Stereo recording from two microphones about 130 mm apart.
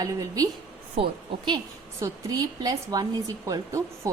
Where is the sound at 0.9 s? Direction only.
40° right (ahead or behind).